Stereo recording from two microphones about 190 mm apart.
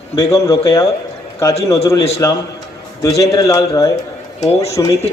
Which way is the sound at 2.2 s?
15° left (ahead or behind).